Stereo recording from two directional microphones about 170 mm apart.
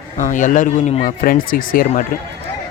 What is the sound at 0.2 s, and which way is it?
Speech, 45° left (ahead or behind).